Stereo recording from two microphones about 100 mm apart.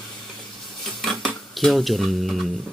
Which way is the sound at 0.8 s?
Centre (ahead or behind).